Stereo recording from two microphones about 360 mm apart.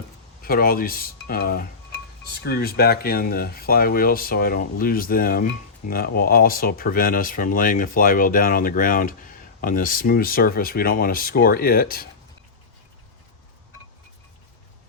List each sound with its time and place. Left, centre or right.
0.4 s speech: left